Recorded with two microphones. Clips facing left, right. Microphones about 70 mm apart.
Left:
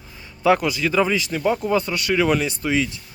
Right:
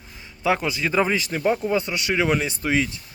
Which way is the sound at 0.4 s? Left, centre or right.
Right.